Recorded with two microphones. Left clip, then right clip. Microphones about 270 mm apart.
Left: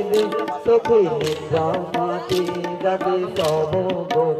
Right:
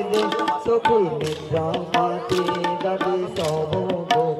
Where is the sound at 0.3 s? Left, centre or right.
Right.